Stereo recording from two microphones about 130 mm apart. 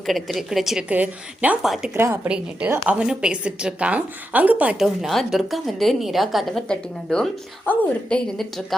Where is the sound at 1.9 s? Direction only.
20° right (ahead or behind).